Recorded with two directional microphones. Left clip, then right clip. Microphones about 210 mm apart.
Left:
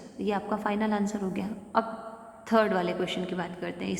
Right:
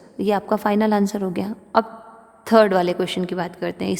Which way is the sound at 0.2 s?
50° right (ahead or behind).